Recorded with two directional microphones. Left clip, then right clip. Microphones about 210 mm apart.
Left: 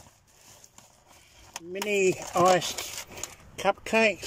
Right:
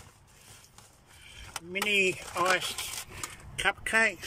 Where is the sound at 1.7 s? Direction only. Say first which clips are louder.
Left 1 dB; 20° left (ahead or behind).